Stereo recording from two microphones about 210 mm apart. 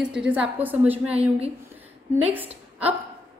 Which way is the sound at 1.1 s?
30° right (ahead or behind).